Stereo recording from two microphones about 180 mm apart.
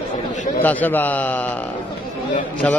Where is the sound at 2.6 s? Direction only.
5° left (ahead or behind).